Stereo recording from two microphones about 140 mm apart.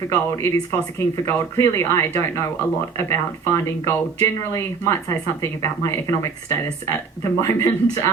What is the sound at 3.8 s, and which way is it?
A woman's voice, 20° left (ahead or behind).